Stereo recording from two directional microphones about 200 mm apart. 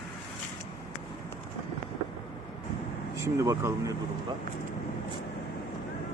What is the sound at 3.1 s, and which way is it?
Speech, 15° right (ahead or behind).